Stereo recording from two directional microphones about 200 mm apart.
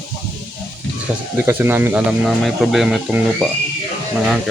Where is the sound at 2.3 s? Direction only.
Centre (ahead or behind).